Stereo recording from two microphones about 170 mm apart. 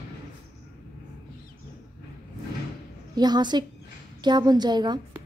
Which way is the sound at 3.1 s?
25° right (ahead or behind).